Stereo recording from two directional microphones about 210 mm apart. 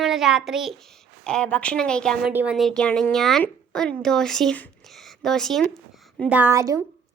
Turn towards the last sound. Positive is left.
turn(degrees=-15)  # may be behind; listen again after turning